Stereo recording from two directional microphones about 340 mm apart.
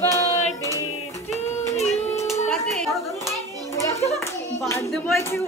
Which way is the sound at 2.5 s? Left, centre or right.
Centre.